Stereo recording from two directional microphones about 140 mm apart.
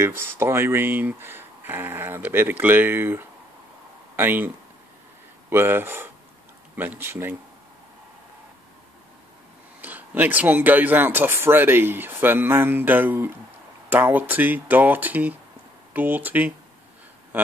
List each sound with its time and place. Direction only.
0.0 s speech: 15° right (ahead or behind)
5.5 s speech: 15° right (ahead or behind)
9.8 s speech: 10° right (ahead or behind)